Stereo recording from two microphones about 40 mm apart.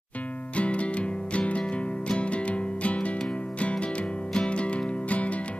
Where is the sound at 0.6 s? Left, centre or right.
Left.